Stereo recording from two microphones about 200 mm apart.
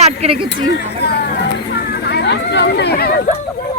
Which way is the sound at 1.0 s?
55° left (ahead or behind).